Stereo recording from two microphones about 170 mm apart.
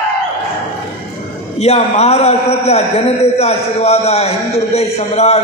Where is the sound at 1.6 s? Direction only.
40° left (ahead or behind).